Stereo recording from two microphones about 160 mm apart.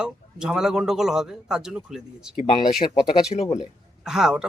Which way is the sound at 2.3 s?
50° left (ahead or behind).